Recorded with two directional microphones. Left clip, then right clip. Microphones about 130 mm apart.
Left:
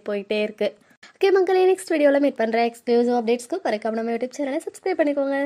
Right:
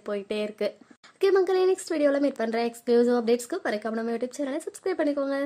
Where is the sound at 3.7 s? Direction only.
15° left (ahead or behind).